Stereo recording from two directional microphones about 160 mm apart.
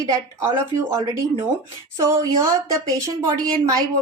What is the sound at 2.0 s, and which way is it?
A woman's voice, 20° right (ahead or behind).